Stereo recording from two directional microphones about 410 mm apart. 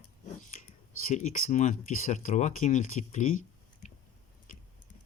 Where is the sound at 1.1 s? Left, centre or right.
Centre.